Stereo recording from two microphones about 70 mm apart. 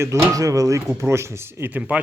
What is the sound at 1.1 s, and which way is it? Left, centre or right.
Speech, right.